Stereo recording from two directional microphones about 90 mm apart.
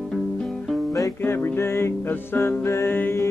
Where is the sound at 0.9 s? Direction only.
30° left (ahead or behind).